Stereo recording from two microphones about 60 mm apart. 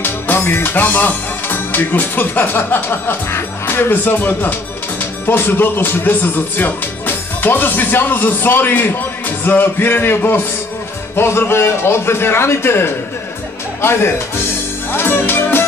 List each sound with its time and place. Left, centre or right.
0.0 s music: left
5.2 s a man's voice: left
13.7 s music: left